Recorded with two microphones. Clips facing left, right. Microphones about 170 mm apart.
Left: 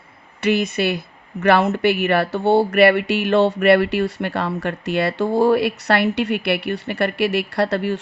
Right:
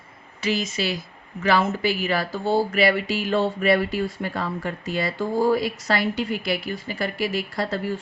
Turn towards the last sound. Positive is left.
turn(degrees=70)  # may be behind; listen again after turning